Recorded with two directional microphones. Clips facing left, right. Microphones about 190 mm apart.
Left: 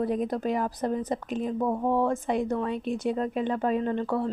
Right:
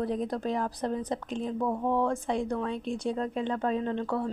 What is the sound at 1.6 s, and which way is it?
Speech, 25° left (ahead or behind).